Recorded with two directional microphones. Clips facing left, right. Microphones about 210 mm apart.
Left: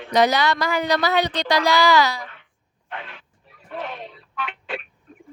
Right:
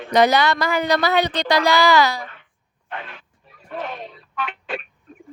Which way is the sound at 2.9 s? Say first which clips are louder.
Right 2 dB; 45° right (ahead or behind).